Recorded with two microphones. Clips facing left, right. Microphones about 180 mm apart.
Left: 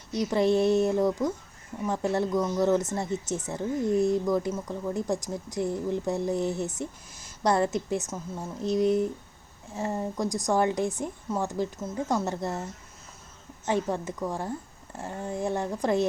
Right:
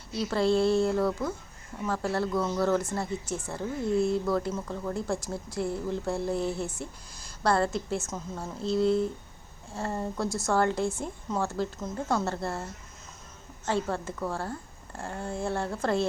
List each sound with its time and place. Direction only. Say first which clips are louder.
0.1 s a woman's voice: left 2 dB; 20° left (ahead or behind)
13.7 s a woman's voice: left 2 dB; 15° left (ahead or behind)